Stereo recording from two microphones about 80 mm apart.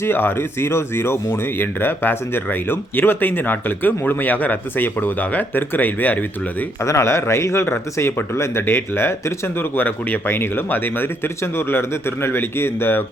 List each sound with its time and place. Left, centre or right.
0.0 s speech: left
6.8 s speech: left